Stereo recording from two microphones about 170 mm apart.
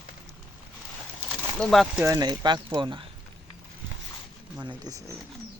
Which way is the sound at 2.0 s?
20° right (ahead or behind).